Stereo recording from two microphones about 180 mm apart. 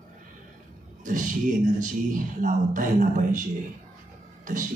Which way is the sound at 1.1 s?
45° right (ahead or behind).